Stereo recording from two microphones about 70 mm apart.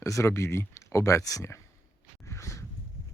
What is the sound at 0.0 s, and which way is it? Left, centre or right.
Speech, left.